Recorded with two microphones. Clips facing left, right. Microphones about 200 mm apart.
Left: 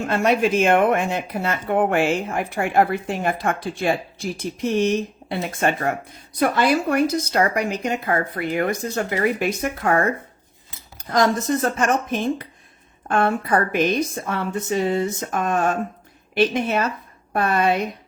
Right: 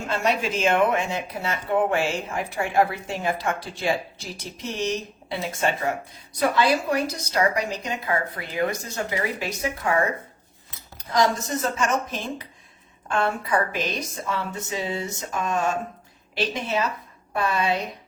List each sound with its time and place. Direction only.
0.1 s speech: 55° left (ahead or behind)